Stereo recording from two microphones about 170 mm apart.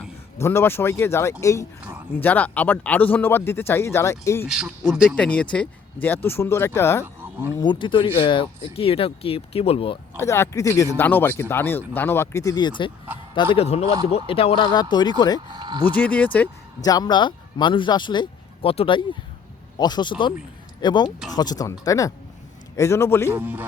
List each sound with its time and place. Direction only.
0.3 s speech: 15° left (ahead or behind)
4.4 s speech: 5° right (ahead or behind); by 7.0 s 15° left (ahead or behind)
7.0 s a sound: 10° right (ahead or behind)
7.6 s speech: 25° left (ahead or behind)
10.2 s speech: 15° left (ahead or behind)
15.4 s speech: 25° right (ahead or behind)
16.0 s speech: 10° left (ahead or behind)
16.8 s speech: 20° left (ahead or behind)
23.3 s speech: 10° right (ahead or behind)